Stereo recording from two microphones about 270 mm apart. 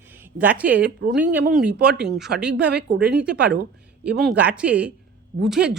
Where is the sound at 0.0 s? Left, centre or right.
Centre.